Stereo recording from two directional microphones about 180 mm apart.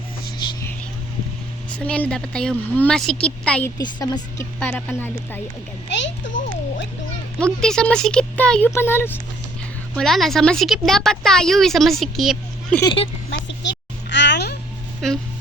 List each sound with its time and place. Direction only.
1.8 s speech: 5° left (ahead or behind)
3.8 s a woman's voice: 20° left (ahead or behind)
4.6 s speech: 10° left (ahead or behind)
5.9 s a sound: 85° left
7.3 s speech: 5° left (ahead or behind)
9.9 s speech: centre (ahead or behind)
12.8 s a woman's voice: 30° left (ahead or behind)
13.3 s a sound: 75° left (ahead or behind)